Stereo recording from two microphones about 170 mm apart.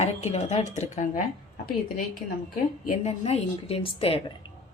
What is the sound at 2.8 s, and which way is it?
A woman's voice, 40° left (ahead or behind).